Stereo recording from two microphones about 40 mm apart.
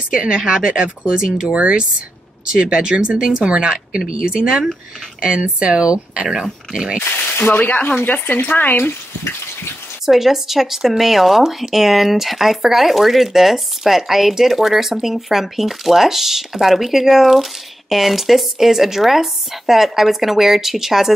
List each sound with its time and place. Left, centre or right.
0.1 s speech: right
1.5 s speech: right
6.2 s speech: centre
6.7 s speech: right
7.0 s a sound: left
7.5 s speech: left
7.9 s speech: left
10.0 s speech: centre